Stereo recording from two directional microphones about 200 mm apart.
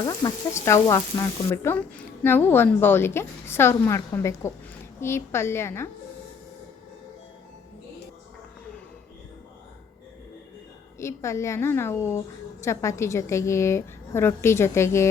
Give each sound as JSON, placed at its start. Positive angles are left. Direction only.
{"t": 0.0, "sound": "a woman's voice", "side_deg": 20}
{"t": 11.0, "sound": "a woman's voice", "side_deg": 15}